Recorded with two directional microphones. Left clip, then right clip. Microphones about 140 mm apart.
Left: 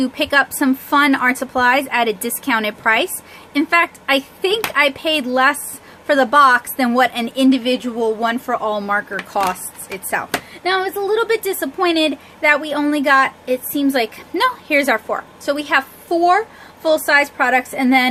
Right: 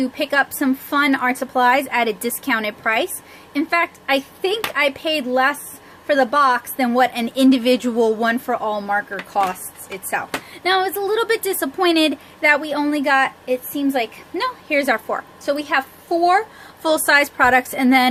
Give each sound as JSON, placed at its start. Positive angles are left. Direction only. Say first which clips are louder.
{"t": 0.0, "sound": "a woman's voice", "louder": "left 3 dB", "side_deg": 5}
{"t": 8.2, "sound": "speech", "louder": "left 1 dB", "side_deg": -10}
{"t": 10.5, "sound": "a woman's voice", "louder": "right 1 dB", "side_deg": -5}
{"t": 13.4, "sound": "a woman's voice", "louder": "left 2 dB", "side_deg": 20}
{"t": 14.8, "sound": "speech", "louder": "left 1 dB", "side_deg": 5}
{"t": 16.8, "sound": "a woman's voice", "louder": "left 1 dB", "side_deg": -15}